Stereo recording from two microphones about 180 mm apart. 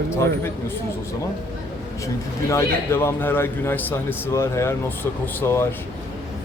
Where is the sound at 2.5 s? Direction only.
15° left (ahead or behind).